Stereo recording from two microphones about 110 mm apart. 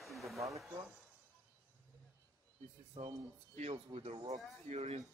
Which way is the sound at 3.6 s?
80° right.